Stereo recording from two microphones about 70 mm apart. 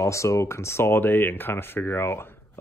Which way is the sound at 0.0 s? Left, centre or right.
Left.